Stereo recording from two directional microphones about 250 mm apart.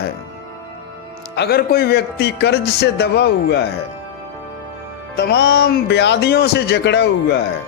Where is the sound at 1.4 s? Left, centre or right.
Left.